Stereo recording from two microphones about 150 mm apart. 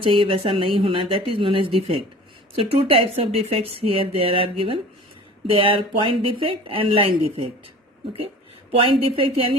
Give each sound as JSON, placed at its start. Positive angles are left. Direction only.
{"t": 0.0, "sound": "speech", "side_deg": -35}
{"t": 8.7, "sound": "speech", "side_deg": -35}